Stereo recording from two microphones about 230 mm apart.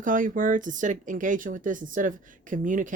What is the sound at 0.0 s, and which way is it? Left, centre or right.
Speech, right.